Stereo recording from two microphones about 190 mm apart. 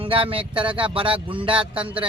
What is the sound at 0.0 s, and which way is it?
Speech, 30° right (ahead or behind).